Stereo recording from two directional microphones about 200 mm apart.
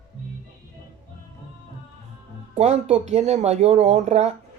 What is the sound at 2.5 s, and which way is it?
Speech, 35° right (ahead or behind).